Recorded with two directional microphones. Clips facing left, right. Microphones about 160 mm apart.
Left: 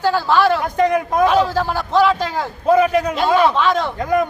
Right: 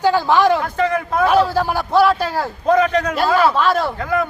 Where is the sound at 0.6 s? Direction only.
15° left (ahead or behind).